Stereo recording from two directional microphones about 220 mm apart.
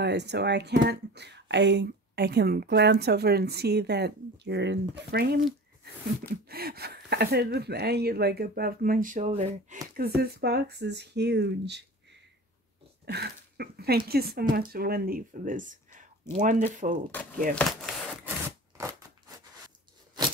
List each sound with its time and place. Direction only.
0.0 s speech: 50° right (ahead or behind)
6.5 s speech: 45° right (ahead or behind)
17.6 s a sound: centre (ahead or behind)